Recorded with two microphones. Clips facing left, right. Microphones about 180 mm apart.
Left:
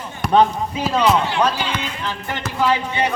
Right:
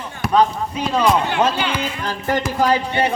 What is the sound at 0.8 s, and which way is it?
Speech, centre (ahead or behind).